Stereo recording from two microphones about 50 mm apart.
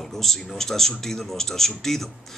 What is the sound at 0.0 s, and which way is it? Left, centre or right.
Speech, centre.